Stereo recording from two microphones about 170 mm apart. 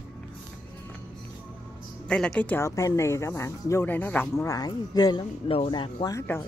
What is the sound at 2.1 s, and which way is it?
Speech, 5° left (ahead or behind).